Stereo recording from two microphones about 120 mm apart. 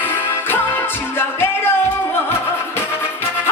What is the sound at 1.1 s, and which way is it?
Music, 20° left (ahead or behind).